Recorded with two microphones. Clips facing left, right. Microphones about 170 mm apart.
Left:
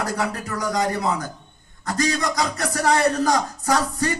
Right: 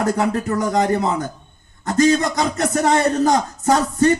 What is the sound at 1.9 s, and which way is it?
A man's voice, 25° right (ahead or behind).